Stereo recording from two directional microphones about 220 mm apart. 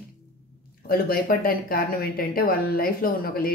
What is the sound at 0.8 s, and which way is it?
Speech, 40° left (ahead or behind).